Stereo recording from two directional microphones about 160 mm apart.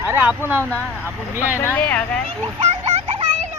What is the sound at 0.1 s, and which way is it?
Speech, 10° right (ahead or behind).